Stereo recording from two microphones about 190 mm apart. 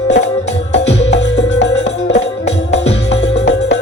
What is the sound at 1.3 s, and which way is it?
Music, 70° left (ahead or behind).